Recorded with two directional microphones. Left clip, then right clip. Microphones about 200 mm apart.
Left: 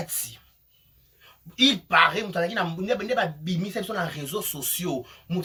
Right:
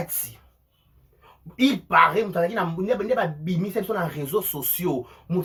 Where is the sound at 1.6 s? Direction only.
5° left (ahead or behind).